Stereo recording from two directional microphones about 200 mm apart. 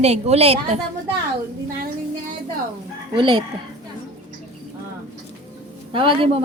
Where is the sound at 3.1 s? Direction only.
25° right (ahead or behind).